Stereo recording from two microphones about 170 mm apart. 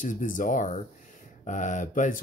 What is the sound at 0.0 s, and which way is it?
Speech, 50° left (ahead or behind).